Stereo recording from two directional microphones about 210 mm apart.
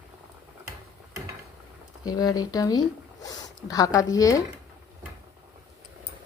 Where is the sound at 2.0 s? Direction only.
20° left (ahead or behind).